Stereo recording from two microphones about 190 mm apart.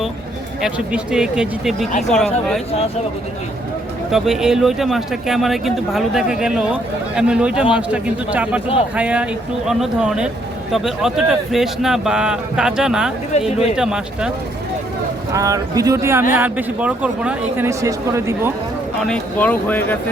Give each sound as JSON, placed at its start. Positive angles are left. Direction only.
{"t": 0.6, "sound": "speech", "side_deg": -5}
{"t": 4.1, "sound": "speech", "side_deg": -5}
{"t": 15.3, "sound": "speech", "side_deg": -15}
{"t": 18.9, "sound": "speech", "side_deg": 5}